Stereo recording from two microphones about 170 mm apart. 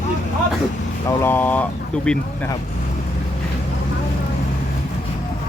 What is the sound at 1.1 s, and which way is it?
Speech, 15° left (ahead or behind).